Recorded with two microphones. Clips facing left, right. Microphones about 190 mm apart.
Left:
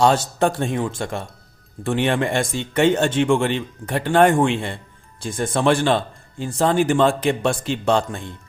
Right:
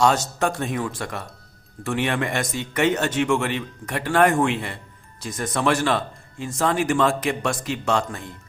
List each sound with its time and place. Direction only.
0.0 s speech: 30° left (ahead or behind)